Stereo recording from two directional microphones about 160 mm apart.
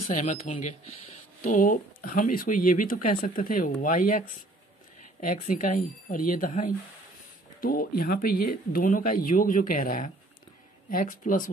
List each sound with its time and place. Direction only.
0.1 s speech: 50° left (ahead or behind)
5.2 s speech: 55° left (ahead or behind)